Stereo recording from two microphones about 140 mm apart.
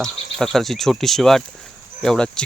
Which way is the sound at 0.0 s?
5° left (ahead or behind).